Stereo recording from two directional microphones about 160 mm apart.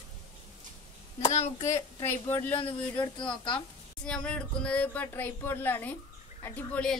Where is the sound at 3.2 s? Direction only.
30° left (ahead or behind).